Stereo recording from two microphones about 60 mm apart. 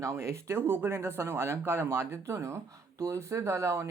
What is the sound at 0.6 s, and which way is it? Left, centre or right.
Speech, right.